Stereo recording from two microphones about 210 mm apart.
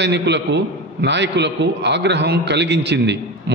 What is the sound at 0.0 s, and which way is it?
A man's voice, 55° right (ahead or behind).